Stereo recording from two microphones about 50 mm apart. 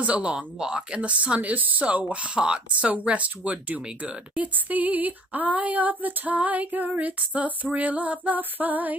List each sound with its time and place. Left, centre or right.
0.0 s speech: right